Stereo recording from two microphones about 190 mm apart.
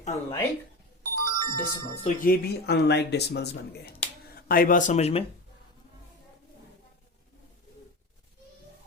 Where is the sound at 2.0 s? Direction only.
45° left (ahead or behind).